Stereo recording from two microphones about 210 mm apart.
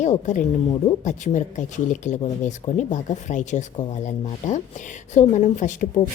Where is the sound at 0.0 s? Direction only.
35° left (ahead or behind).